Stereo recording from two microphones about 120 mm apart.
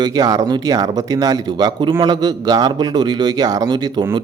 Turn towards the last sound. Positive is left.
turn(degrees=-35)  # may be behind; listen again after turning